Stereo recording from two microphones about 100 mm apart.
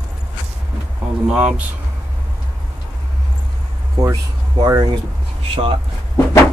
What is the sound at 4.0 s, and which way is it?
Speech, 40° right (ahead or behind).